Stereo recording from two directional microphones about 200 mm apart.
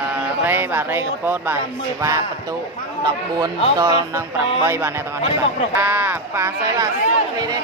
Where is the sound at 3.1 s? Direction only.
20° right (ahead or behind).